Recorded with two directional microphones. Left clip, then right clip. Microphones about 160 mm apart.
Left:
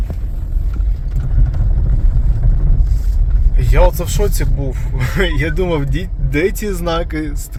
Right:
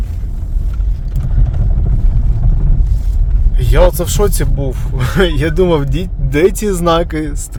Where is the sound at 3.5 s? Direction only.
30° right (ahead or behind).